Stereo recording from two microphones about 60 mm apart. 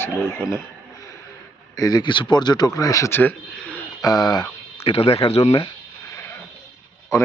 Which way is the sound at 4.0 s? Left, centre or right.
Left.